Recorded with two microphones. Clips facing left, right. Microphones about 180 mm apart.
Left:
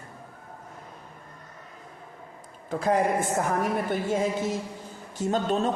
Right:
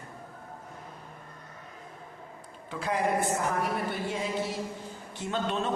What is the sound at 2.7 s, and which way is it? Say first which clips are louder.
A woman's voice: left 5 dB; 45° left (ahead or behind).